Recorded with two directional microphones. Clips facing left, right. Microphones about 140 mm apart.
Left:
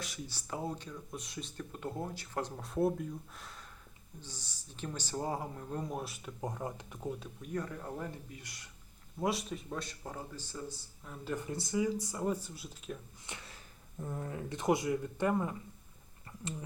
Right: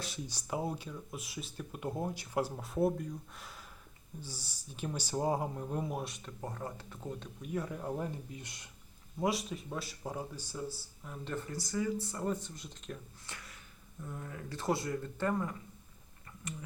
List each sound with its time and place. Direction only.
0.3 s speech: 15° right (ahead or behind); by 6.3 s 5° left (ahead or behind)
6.4 s speech: 15° left (ahead or behind)
7.4 s speech: 10° right (ahead or behind)
9.1 s speech: centre (ahead or behind)
11.3 s speech: 20° left (ahead or behind); by 13.0 s 5° left (ahead or behind)
13.2 s a sound: 25° left (ahead or behind)
14.0 s speech: 35° left (ahead or behind)
14.3 s speech: 20° left (ahead or behind)